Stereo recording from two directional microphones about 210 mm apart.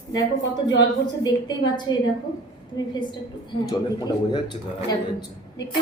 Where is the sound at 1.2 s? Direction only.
20° left (ahead or behind).